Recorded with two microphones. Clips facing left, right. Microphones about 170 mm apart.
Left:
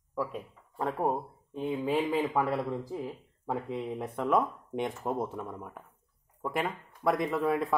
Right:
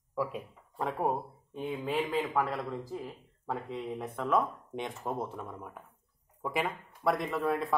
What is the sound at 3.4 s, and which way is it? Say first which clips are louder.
Speech: left 3 dB; 10° left (ahead or behind).